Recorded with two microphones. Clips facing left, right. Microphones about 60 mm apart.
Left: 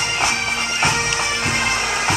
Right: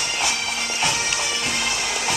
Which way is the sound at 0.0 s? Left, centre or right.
Left.